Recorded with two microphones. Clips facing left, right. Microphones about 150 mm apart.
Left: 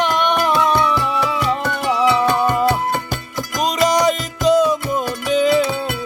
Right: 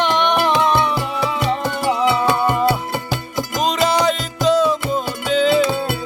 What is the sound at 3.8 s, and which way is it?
Music, 15° left (ahead or behind).